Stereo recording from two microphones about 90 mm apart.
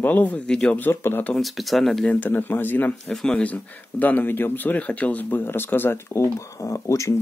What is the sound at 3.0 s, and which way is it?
Speech, 5° left (ahead or behind).